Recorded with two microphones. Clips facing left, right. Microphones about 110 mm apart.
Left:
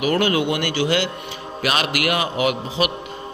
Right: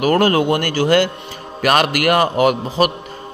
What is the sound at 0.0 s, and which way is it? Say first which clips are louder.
A man's voice: right 5 dB; 45° right (ahead or behind).